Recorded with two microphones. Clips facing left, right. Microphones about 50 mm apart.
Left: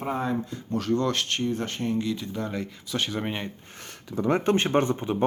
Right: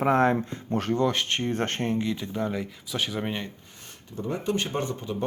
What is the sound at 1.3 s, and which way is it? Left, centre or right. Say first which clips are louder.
Speech: even; right.